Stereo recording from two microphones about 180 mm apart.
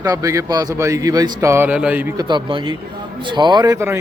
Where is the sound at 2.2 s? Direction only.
25° right (ahead or behind).